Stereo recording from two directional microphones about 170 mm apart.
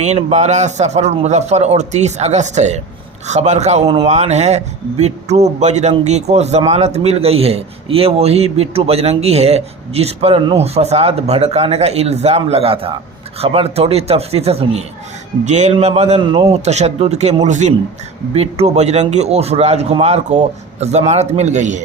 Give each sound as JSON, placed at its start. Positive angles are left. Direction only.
{"t": 0.0, "sound": "speech", "side_deg": -40}